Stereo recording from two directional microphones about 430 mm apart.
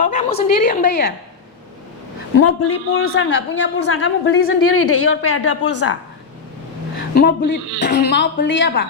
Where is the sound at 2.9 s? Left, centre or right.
Left.